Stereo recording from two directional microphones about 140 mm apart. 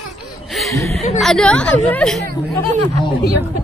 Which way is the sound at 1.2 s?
5° left (ahead or behind).